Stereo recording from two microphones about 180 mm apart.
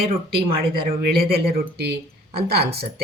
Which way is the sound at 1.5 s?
60° right (ahead or behind).